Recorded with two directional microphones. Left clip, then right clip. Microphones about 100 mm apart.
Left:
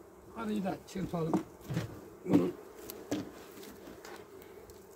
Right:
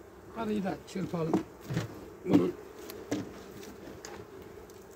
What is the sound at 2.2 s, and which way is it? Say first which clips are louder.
Bee: right 3 dB; 40° left (ahead or behind).